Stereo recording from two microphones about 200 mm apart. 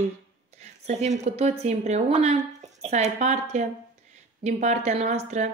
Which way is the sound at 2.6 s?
35° right (ahead or behind).